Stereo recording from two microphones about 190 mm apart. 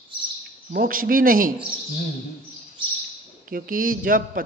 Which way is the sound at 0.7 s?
50° right (ahead or behind).